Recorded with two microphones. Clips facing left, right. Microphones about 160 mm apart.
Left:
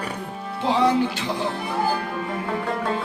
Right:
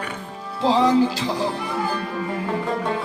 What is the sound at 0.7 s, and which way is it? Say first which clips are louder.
Music: right 2 dB; 35° right (ahead or behind).